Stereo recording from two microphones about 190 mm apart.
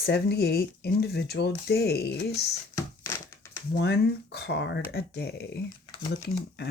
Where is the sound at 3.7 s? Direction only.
60° left (ahead or behind).